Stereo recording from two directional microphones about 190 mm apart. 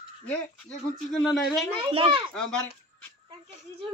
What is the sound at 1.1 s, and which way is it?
Speech, centre (ahead or behind).